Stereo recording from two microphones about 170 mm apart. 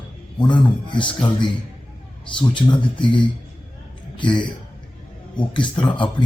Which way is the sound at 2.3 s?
30° left (ahead or behind).